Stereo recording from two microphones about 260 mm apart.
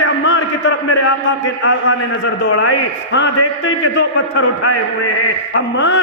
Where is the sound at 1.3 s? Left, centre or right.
Left.